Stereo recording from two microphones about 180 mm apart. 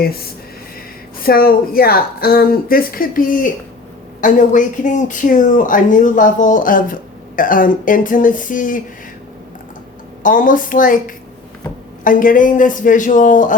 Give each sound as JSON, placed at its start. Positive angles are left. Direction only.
{"t": 1.2, "sound": "a woman's voice", "side_deg": 55}
{"t": 10.2, "sound": "speech", "side_deg": 50}
{"t": 12.0, "sound": "speech", "side_deg": 50}